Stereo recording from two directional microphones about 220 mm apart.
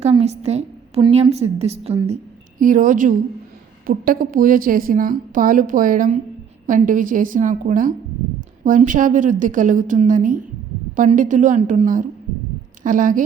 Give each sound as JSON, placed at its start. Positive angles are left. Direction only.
{"t": 0.0, "sound": "a woman's voice", "side_deg": -30}